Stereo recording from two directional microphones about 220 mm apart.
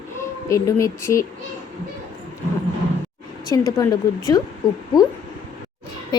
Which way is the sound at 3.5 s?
15° left (ahead or behind).